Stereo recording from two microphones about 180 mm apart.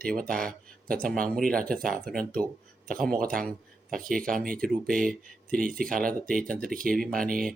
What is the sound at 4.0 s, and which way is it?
Speech, 50° right (ahead or behind).